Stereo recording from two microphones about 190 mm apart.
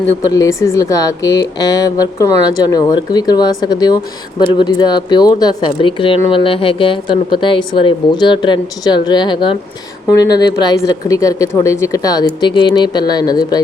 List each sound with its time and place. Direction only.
0.3 s speech: 15° left (ahead or behind)